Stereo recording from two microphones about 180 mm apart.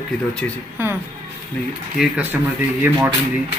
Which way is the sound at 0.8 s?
10° right (ahead or behind).